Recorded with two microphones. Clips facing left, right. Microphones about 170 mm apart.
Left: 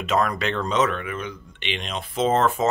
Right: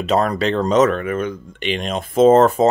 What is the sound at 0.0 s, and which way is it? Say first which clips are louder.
Speech: right 5 dB; 35° right (ahead or behind).